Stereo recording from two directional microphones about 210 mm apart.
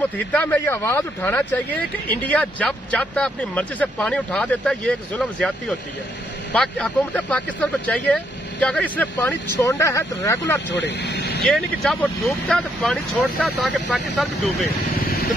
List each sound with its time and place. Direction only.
0.3 s speech: 10° left (ahead or behind)
10.7 s speech: 55° left (ahead or behind)
11.5 s speech: 5° left (ahead or behind)
15.0 s vehicle: 45° left (ahead or behind)